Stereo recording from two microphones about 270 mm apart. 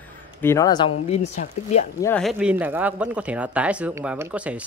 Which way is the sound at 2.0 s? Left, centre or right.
Centre.